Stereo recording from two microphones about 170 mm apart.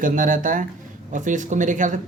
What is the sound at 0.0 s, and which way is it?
Speech, 50° right (ahead or behind).